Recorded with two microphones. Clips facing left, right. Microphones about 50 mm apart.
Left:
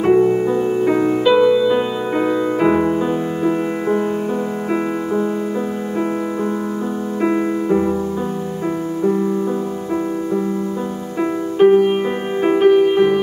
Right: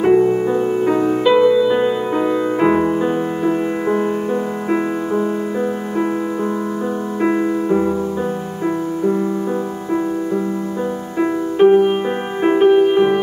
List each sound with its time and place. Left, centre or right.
0.0 s music: centre
2.6 s music: centre
7.2 s music: centre
11.5 s music: centre